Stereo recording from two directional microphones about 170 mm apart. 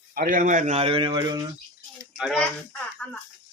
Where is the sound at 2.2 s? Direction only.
Centre (ahead or behind).